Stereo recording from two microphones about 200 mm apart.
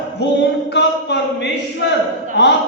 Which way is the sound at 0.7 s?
60° left (ahead or behind).